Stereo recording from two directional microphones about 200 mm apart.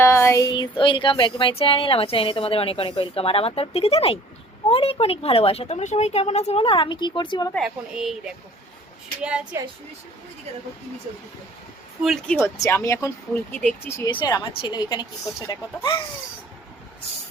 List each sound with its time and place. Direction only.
0.0 s a sound: 15° left (ahead or behind)
7.5 s speech: centre (ahead or behind)
9.2 s speech: 5° right (ahead or behind)
12.0 s speech: centre (ahead or behind)
12.4 s speech: 15° left (ahead or behind)
14.1 s a sound: 20° left (ahead or behind)